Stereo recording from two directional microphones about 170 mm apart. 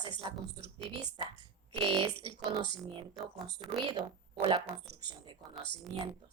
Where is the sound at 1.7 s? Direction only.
30° right (ahead or behind).